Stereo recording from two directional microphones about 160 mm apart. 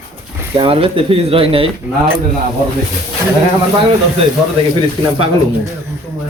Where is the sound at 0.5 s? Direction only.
35° right (ahead or behind).